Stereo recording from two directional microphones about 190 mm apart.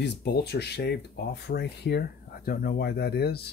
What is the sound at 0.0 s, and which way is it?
Speech, 60° left (ahead or behind).